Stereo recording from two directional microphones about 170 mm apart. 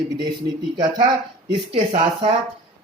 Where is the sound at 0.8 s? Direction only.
25° right (ahead or behind).